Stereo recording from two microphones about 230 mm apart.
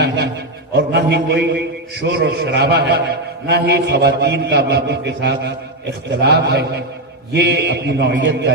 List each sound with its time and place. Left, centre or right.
0.7 s a man's voice: right